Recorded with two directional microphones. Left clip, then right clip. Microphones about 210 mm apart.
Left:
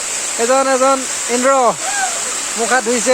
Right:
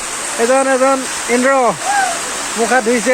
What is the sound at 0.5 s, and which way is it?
Speech, 20° left (ahead or behind).